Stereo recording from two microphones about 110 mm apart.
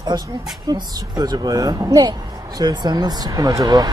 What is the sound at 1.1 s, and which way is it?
Speech, 35° right (ahead or behind).